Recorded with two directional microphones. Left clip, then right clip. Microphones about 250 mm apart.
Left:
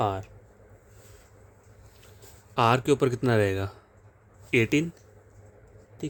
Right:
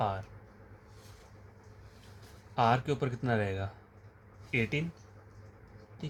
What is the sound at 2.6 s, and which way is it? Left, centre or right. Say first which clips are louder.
Speech: left 6 dB; left.